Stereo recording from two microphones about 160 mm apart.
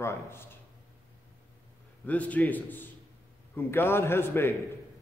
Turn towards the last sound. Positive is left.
turn(degrees=15)  # may be behind; listen again after turning